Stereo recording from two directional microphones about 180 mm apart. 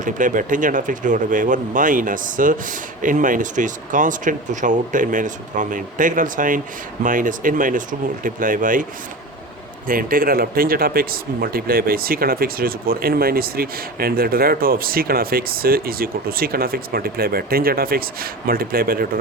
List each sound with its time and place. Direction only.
0.0 s speech: 45° right (ahead or behind)